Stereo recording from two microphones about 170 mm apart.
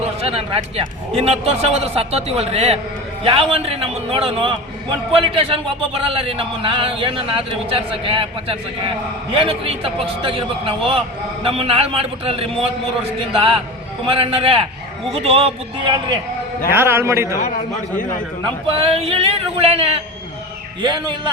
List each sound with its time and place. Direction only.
0.0 s speech: 35° right (ahead or behind)
16.7 s a man's voice: 15° right (ahead or behind)
18.7 s a man's voice: 35° right (ahead or behind)